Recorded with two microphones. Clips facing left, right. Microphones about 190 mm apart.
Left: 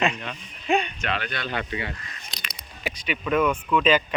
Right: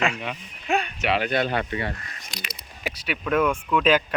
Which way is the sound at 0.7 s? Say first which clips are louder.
Right 1 dB; 10° right (ahead or behind).